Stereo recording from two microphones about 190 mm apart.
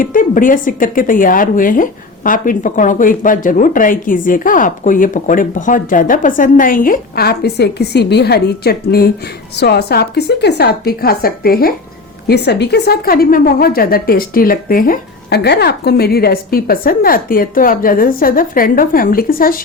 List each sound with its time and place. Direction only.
0.0 s a woman's voice: 45° left (ahead or behind)